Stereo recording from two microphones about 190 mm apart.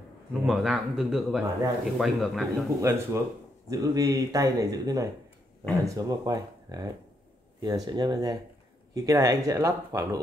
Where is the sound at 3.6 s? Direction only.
20° right (ahead or behind).